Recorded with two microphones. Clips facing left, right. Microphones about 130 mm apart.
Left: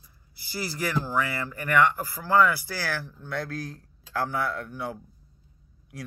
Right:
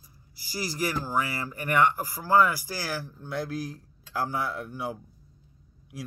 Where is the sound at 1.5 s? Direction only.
25° right (ahead or behind).